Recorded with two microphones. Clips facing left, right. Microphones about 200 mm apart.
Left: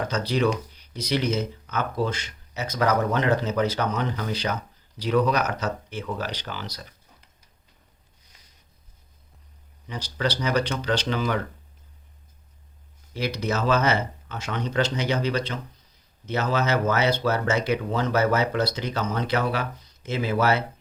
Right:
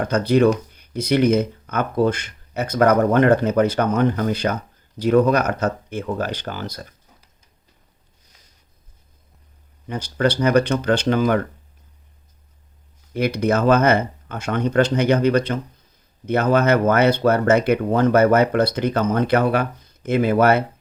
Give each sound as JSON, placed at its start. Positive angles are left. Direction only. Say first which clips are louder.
{"t": 0.0, "sound": "speech", "louder": "right 8 dB", "side_deg": -55}
{"t": 9.8, "sound": "speech", "louder": "right 7 dB", "side_deg": -55}
{"t": 13.1, "sound": "speech", "louder": "right 7 dB", "side_deg": -55}